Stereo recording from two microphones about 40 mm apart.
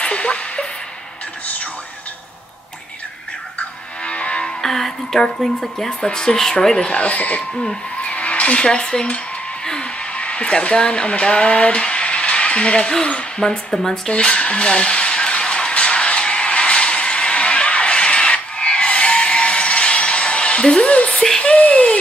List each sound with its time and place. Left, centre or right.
0.0 s a sound: left
3.5 s music: left
4.6 s a woman's voice: centre
5.9 s a woman's voice: centre
7.0 s speech: left
8.0 s a sound: left
8.6 s dishes: centre
10.1 s speech: left; by 14.1 s centre
14.1 s a sound: left